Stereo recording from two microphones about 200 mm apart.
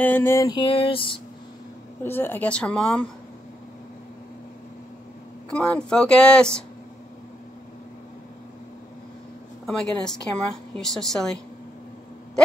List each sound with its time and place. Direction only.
0.0 s a sound: 10° left (ahead or behind); by 1.2 s 25° left (ahead or behind)
2.0 s speech: 10° left (ahead or behind)
5.5 s a woman's voice: 5° left (ahead or behind)
9.7 s a woman's voice: 5° left (ahead or behind)